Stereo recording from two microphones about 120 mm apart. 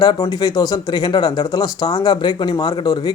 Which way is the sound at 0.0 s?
35° left (ahead or behind).